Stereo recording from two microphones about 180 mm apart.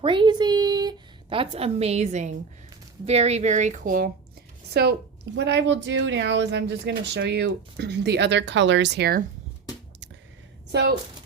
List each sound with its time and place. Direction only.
0.0 s a sound: 25° right (ahead or behind)
3.1 s speech: 35° right (ahead or behind)
4.7 s a woman's voice: 65° right (ahead or behind)
10.7 s speech: 70° right (ahead or behind)